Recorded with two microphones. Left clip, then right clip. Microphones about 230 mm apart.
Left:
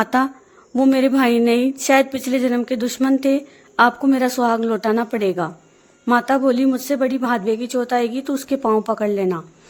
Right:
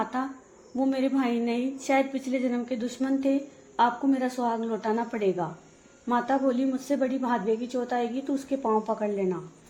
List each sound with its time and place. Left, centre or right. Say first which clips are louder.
0.0 s a woman's voice: left 12 dB; left